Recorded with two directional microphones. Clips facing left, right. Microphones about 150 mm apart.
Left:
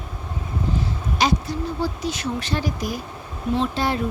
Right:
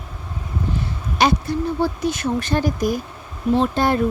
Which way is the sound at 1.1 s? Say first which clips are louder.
Right 4 dB; 60° right (ahead or behind).